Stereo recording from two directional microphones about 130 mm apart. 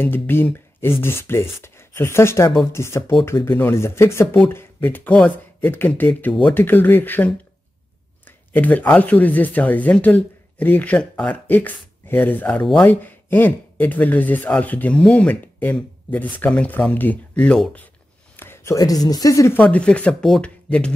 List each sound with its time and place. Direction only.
0.0 s speech: 15° left (ahead or behind)
8.5 s a woman's voice: 10° left (ahead or behind)
19.6 s speech: 10° left (ahead or behind)